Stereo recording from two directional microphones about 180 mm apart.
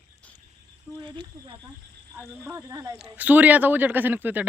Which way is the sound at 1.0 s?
25° right (ahead or behind).